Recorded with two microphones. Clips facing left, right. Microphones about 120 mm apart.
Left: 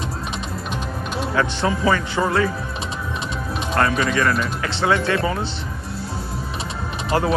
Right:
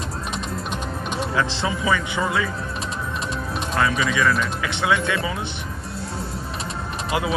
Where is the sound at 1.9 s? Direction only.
35° left (ahead or behind).